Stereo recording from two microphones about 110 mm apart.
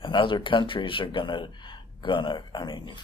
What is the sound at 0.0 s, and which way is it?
Speech, 50° left (ahead or behind).